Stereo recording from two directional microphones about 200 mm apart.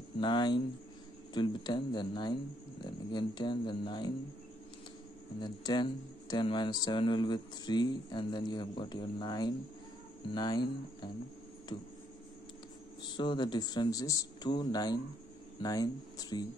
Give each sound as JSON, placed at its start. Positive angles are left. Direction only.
{"t": 0.2, "sound": "speech", "side_deg": 25}
{"t": 5.4, "sound": "speech", "side_deg": 20}
{"t": 11.7, "sound": "speech", "side_deg": 25}
{"t": 13.0, "sound": "speech", "side_deg": 20}